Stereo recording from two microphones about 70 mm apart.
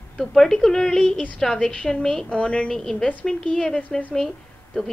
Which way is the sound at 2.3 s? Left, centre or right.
Centre.